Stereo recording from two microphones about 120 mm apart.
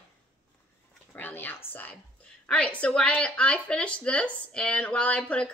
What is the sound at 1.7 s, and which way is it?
A woman's voice, 15° left (ahead or behind).